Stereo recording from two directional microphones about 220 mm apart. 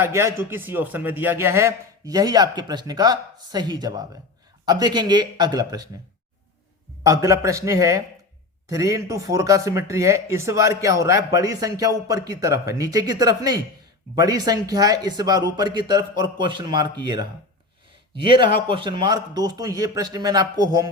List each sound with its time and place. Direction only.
0.0 s a man's voice: 10° right (ahead or behind)
7.0 s a man's voice: 15° right (ahead or behind)
18.1 s speech: 20° right (ahead or behind)